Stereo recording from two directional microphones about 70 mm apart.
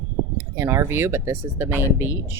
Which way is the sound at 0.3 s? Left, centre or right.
Right.